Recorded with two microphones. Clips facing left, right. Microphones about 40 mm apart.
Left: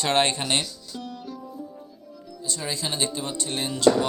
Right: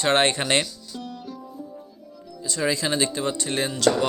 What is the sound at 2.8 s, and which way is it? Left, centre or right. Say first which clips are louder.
Speech: right 5 dB; right.